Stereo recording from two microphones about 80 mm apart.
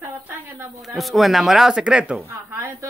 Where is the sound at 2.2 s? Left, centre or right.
Right.